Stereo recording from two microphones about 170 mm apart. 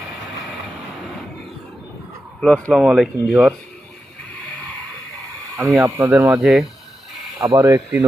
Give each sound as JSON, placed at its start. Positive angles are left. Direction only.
{"t": 2.4, "sound": "speech", "side_deg": 5}
{"t": 5.5, "sound": "speech", "side_deg": -15}
{"t": 7.4, "sound": "speech", "side_deg": -25}